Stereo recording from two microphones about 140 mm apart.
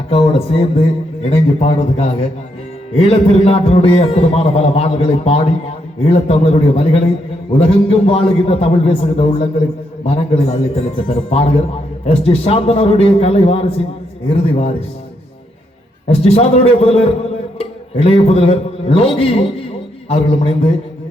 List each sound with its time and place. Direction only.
0.1 s a man's voice: 45° left (ahead or behind)
16.0 s a man's voice: 50° left (ahead or behind)